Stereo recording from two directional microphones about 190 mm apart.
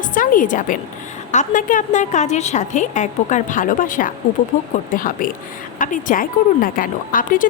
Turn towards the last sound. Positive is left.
turn(degrees=45)  # may be behind; listen again after turning